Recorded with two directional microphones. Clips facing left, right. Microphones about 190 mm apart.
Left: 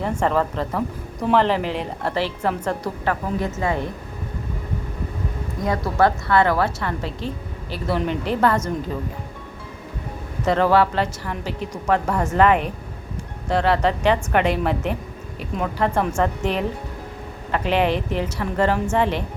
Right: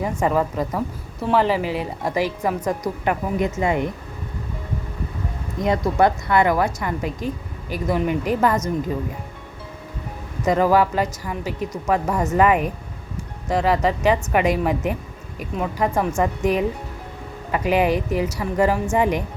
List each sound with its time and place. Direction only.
0.2 s a woman's voice: 10° right (ahead or behind)
5.6 s a woman's voice: 20° right (ahead or behind)
10.4 s a woman's voice: 10° right (ahead or behind)